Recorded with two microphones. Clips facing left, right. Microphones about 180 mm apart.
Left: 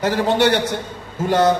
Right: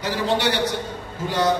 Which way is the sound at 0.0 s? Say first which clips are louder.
Left 5 dB; 50° left (ahead or behind).